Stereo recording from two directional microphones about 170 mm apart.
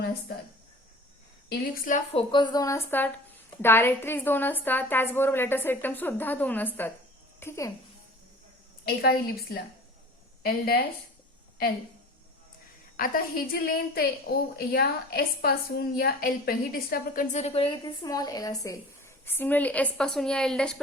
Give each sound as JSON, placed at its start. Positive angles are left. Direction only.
{"t": 0.0, "sound": "speech", "side_deg": 75}
{"t": 1.5, "sound": "a woman's voice", "side_deg": 60}
{"t": 2.1, "sound": "a woman's voice", "side_deg": 25}
{"t": 8.8, "sound": "a woman's voice", "side_deg": 65}
{"t": 13.0, "sound": "a woman's voice", "side_deg": 60}
{"t": 17.3, "sound": "a woman's voice", "side_deg": 35}